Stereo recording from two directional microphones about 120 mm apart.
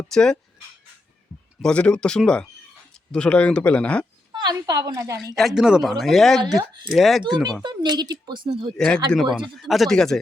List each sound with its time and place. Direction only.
0.1 s speech: 5° left (ahead or behind)
1.6 s speech: 10° left (ahead or behind)
4.4 s speech: 35° right (ahead or behind)
5.4 s speech: 5° right (ahead or behind)
6.4 s speech: 30° right (ahead or behind)
6.9 s speech: centre (ahead or behind)
7.6 s speech: 35° right (ahead or behind)
9.4 s speech: centre (ahead or behind)